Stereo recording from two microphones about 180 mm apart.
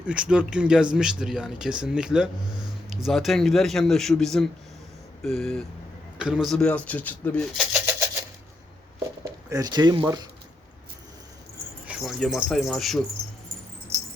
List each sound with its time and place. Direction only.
0.0 s speech: 5° right (ahead or behind)
9.2 s speech: 20° right (ahead or behind)
11.9 s speech: centre (ahead or behind)
13.9 s mouse: 15° right (ahead or behind)